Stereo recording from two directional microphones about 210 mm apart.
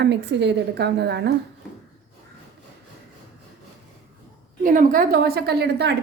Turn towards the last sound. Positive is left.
turn(degrees=-50)  # may be behind; listen again after turning